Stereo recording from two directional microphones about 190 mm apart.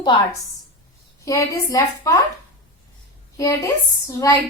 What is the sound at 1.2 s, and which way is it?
Speech, 15° left (ahead or behind).